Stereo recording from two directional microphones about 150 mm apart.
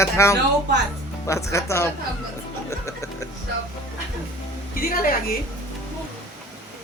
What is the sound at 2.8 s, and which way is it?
Music, 20° left (ahead or behind).